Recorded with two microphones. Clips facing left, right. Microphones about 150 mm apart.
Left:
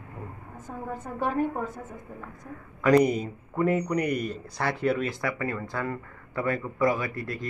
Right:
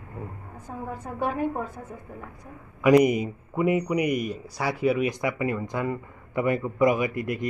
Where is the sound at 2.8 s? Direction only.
15° right (ahead or behind).